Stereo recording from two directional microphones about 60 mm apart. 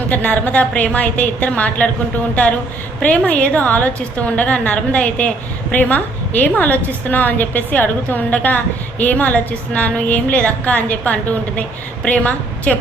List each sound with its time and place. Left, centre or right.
0.1 s a woman's voice: left
3.0 s a woman's voice: left